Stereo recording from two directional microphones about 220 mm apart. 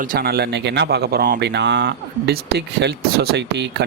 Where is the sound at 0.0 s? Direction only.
40° right (ahead or behind).